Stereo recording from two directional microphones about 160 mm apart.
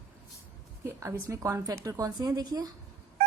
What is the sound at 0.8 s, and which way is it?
Speech, 15° right (ahead or behind).